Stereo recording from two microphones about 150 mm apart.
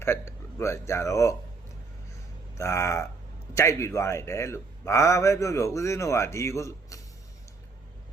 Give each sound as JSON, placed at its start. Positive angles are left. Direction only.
{"t": 0.0, "sound": "speech", "side_deg": 15}
{"t": 2.6, "sound": "a man's voice", "side_deg": 20}